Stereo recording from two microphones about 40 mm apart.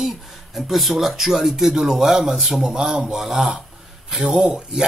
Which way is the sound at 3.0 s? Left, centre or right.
Centre.